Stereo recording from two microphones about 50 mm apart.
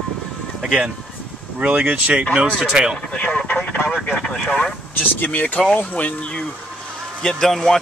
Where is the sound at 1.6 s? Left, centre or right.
Right.